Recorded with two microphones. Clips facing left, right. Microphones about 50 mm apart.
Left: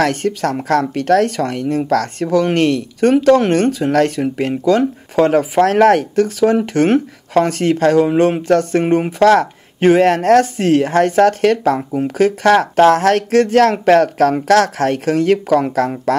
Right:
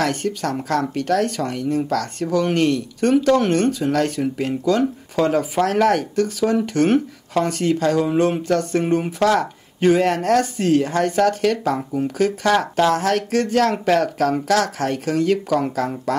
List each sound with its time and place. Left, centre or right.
0.0 s speech: left